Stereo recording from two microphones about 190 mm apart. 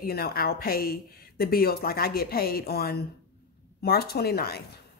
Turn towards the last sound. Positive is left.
turn(degrees=55)  # may be behind; listen again after turning